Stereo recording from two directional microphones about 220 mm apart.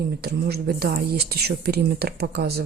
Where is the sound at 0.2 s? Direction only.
45° right (ahead or behind).